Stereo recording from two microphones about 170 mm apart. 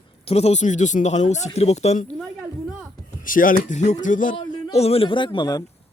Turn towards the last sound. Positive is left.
turn(degrees=25)  # may be behind; listen again after turning